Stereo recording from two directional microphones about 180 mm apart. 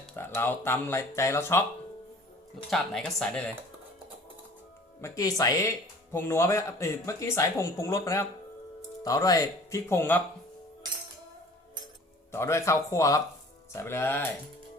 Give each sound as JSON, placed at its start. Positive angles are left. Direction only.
{"t": 0.2, "sound": "speech", "side_deg": 15}
{"t": 2.6, "sound": "speech", "side_deg": 5}
{"t": 4.9, "sound": "speech", "side_deg": 15}
{"t": 12.3, "sound": "speech", "side_deg": 15}